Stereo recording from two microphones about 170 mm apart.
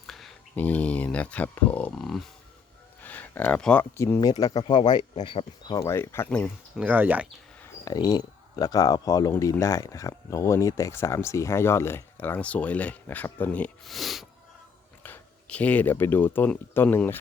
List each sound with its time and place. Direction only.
0.1 s speech: centre (ahead or behind)
6.7 s speech: 10° right (ahead or behind)
7.9 s speech: 25° left (ahead or behind)